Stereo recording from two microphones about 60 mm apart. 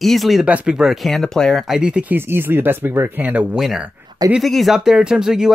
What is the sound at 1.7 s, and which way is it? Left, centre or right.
Speech, centre.